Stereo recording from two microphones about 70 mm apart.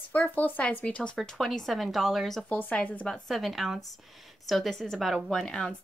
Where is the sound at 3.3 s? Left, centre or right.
Centre.